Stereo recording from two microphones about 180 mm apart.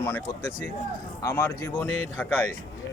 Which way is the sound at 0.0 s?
15° left (ahead or behind).